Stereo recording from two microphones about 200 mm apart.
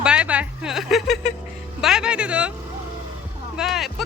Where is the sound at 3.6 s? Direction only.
Centre (ahead or behind).